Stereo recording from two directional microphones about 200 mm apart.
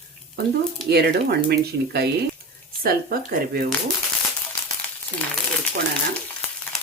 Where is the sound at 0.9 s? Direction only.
55° right (ahead or behind).